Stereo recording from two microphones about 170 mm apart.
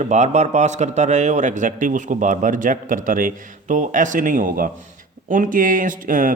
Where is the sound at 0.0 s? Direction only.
45° right (ahead or behind).